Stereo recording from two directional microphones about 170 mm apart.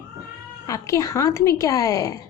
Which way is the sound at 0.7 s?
20° left (ahead or behind).